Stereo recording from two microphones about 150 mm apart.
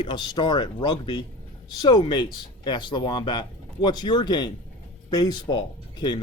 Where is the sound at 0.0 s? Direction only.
30° left (ahead or behind).